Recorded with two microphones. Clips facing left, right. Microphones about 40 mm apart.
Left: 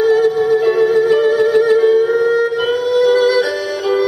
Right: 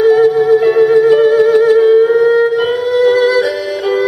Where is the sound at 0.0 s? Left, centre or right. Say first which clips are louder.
Right 4 dB; centre.